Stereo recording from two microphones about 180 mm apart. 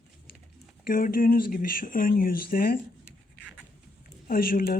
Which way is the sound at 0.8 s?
50° left (ahead or behind).